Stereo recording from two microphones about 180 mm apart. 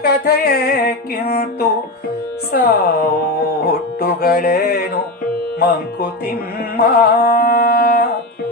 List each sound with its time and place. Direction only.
0.0 s speech: 60° left (ahead or behind)
6.7 s carnatic music: 55° left (ahead or behind)